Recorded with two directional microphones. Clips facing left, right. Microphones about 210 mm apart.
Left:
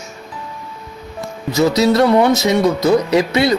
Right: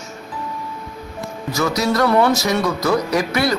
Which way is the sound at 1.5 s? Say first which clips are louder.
Left 6 dB; 25° left (ahead or behind).